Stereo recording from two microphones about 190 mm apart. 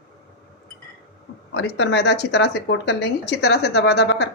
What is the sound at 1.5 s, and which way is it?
Speech, 65° left (ahead or behind).